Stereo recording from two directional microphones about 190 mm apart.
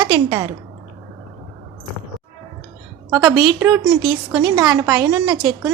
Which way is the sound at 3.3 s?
20° right (ahead or behind).